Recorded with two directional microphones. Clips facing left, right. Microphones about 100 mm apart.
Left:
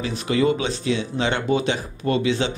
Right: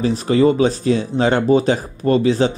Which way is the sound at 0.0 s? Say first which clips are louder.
Right 6 dB; 35° right (ahead or behind).